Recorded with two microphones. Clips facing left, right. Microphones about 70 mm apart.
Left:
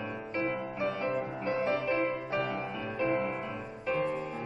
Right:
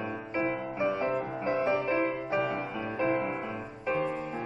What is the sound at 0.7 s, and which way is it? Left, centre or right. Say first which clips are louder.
Music: right 4 dB; centre.